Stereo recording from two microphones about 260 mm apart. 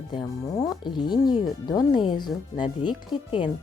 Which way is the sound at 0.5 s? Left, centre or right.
Centre.